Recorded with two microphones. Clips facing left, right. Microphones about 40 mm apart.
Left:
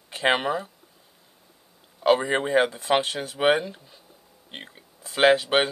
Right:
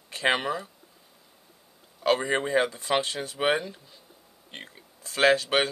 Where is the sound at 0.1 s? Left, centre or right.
Left.